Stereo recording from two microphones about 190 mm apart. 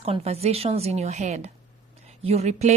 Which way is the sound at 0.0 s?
30° right (ahead or behind).